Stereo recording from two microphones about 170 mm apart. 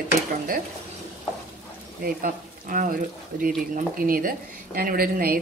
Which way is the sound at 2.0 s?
55° right (ahead or behind).